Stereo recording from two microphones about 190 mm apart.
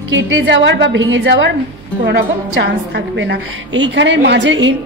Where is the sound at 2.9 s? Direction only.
60° right (ahead or behind).